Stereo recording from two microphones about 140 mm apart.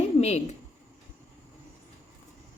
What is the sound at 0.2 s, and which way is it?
Speech, 50° left (ahead or behind).